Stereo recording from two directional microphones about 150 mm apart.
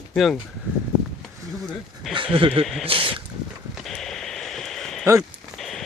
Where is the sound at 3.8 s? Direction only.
5° left (ahead or behind).